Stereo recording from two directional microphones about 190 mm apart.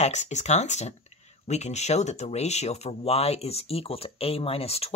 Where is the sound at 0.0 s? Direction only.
35° left (ahead or behind).